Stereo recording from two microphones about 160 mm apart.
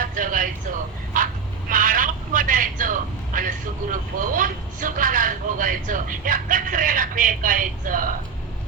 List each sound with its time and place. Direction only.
0.2 s vehicle: 60° right (ahead or behind)
1.7 s a sound: 60° right (ahead or behind)
3.9 s vehicle: 55° right (ahead or behind)